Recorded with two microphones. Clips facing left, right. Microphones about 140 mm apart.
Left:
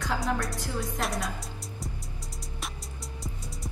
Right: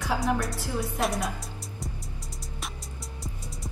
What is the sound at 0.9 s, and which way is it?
Speech, centre (ahead or behind).